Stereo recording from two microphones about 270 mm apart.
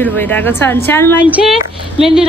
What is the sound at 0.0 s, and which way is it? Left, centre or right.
Speech, centre.